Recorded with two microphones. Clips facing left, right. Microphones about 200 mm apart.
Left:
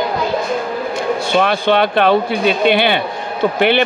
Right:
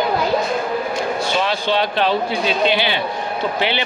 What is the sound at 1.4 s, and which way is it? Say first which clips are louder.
Speech: left 7 dB; 55° left (ahead or behind).